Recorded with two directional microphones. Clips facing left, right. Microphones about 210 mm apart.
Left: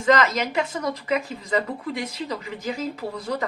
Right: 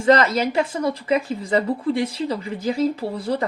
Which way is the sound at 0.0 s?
35° right (ahead or behind).